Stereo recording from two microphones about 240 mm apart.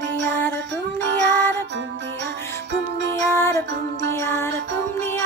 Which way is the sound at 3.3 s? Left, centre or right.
Centre.